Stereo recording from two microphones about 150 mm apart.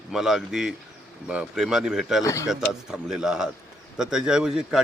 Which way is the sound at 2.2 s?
20° left (ahead or behind).